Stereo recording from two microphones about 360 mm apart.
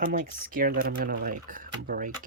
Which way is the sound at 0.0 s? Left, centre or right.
Right.